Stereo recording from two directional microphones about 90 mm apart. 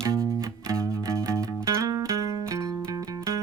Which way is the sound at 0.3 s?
35° right (ahead or behind).